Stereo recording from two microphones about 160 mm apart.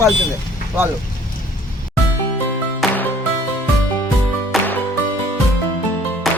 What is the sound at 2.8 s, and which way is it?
Music, centre (ahead or behind).